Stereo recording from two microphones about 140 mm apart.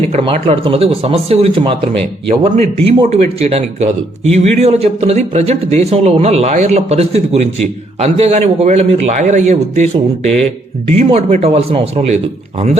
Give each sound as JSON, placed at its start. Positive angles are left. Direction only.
{"t": 0.1, "sound": "speech", "side_deg": -45}